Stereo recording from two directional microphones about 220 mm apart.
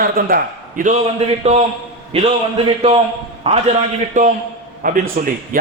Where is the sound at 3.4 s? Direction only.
30° right (ahead or behind).